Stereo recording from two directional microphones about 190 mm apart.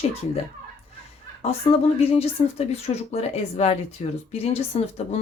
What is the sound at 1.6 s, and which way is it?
A woman's voice, 30° left (ahead or behind).